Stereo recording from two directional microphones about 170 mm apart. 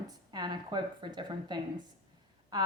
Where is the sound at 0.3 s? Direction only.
25° right (ahead or behind).